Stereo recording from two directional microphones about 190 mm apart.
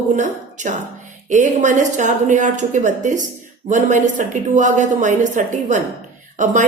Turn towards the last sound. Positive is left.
turn(degrees=-40)  # may be behind; listen again after turning